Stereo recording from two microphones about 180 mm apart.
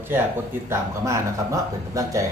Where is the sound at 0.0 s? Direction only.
10° right (ahead or behind).